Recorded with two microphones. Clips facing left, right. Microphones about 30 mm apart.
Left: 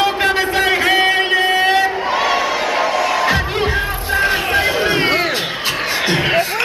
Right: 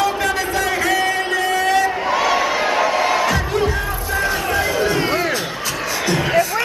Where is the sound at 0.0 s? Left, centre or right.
Left.